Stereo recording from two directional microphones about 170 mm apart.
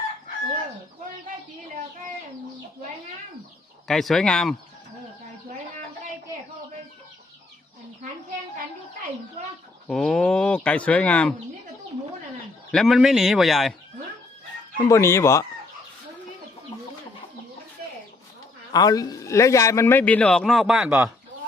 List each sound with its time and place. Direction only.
3.8 s a man's voice: centre (ahead or behind)
9.9 s speech: 5° left (ahead or behind)
12.7 s a man's voice: centre (ahead or behind)
14.8 s speech: 15° left (ahead or behind)
18.7 s speech: 20° left (ahead or behind); by 21.0 s 5° right (ahead or behind)